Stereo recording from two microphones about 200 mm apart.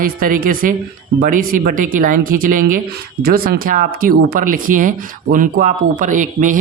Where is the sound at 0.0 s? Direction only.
45° right (ahead or behind).